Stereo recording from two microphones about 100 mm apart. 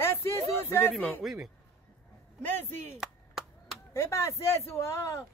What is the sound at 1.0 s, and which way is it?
Speech, 15° left (ahead or behind).